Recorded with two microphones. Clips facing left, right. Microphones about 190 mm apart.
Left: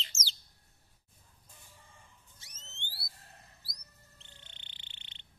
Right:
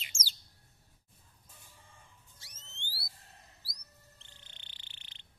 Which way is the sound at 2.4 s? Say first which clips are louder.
Left 2 dB; 20° left (ahead or behind).